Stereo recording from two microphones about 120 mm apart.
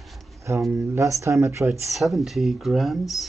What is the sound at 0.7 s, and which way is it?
Speech, 25° right (ahead or behind).